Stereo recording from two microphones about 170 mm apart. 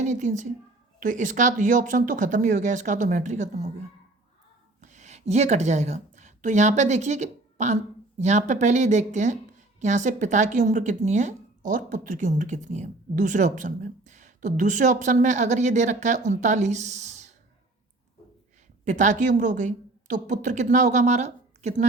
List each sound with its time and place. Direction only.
0.0 s a woman's voice: 45° right (ahead or behind)
4.8 s a woman's voice: 45° right (ahead or behind)
18.9 s a woman's voice: 45° right (ahead or behind)